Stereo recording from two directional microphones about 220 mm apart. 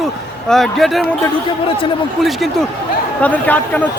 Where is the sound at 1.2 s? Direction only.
20° left (ahead or behind).